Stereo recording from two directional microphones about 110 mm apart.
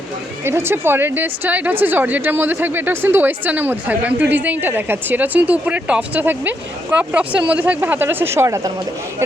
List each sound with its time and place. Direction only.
0.4 s a woman's voice: 20° right (ahead or behind)